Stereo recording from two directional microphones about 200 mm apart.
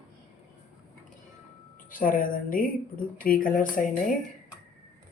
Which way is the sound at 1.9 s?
45° left (ahead or behind).